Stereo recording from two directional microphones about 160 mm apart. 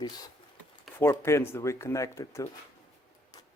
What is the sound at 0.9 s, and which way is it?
Speech, 15° left (ahead or behind).